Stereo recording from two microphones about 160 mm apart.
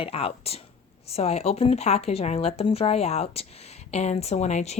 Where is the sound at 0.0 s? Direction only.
35° left (ahead or behind).